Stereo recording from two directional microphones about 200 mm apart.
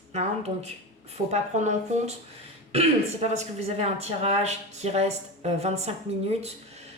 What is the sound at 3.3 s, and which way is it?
Speech, 30° right (ahead or behind).